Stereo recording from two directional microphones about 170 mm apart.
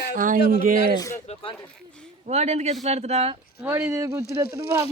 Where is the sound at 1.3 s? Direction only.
35° left (ahead or behind).